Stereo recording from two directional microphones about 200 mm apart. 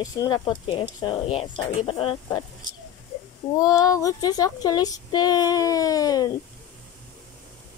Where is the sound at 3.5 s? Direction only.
15° left (ahead or behind).